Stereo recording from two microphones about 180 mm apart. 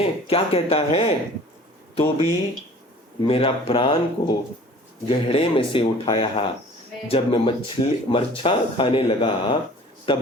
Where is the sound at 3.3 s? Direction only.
30° left (ahead or behind).